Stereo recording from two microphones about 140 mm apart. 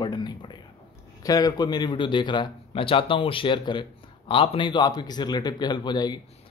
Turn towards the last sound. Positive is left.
turn(degrees=30)  # may be behind; listen again after turning